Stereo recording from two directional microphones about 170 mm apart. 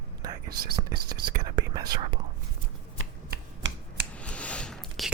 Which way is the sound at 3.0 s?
80° right.